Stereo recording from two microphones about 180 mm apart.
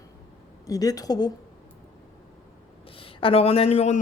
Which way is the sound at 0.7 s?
20° left (ahead or behind).